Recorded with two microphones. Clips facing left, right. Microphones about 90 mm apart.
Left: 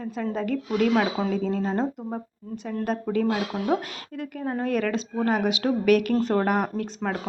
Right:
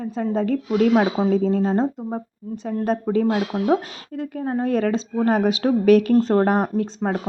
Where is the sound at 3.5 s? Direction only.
20° right (ahead or behind).